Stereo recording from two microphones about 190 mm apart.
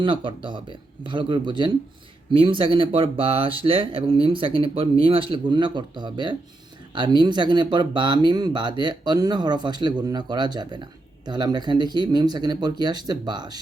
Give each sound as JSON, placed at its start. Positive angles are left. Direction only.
{"t": 0.0, "sound": "speech", "side_deg": -25}